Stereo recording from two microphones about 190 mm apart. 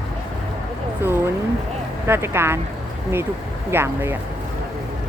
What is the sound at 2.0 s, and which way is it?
Speech, 10° right (ahead or behind).